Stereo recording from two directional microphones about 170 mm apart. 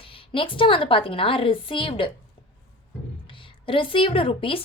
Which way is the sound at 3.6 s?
30° left (ahead or behind).